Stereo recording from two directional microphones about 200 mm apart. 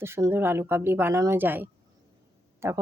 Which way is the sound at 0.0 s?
10° right (ahead or behind).